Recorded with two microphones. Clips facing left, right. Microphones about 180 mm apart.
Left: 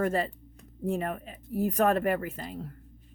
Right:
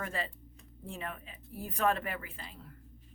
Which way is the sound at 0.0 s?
45° left (ahead or behind).